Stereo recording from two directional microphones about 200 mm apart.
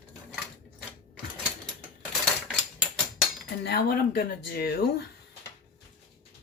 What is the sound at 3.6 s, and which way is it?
Speech, 50° left (ahead or behind).